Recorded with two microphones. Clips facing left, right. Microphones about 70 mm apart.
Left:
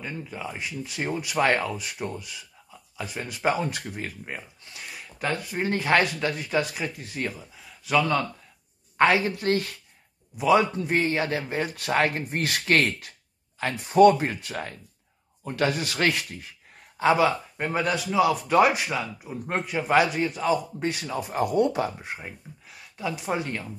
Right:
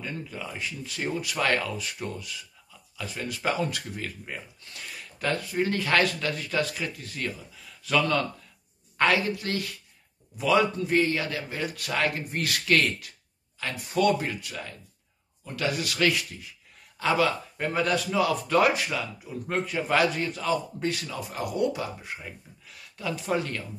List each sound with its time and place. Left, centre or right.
0.0 s speech: centre
7.8 s a man's voice: centre
8.9 s a woman's voice: left
9.3 s a man's voice: left
10.3 s a man's voice: left
17.0 s speech: left
19.6 s a man's voice: centre; by 22.3 s left
22.7 s speech: centre